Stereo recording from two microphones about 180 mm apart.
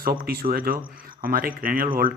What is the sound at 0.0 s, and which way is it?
Speech, 55° right (ahead or behind).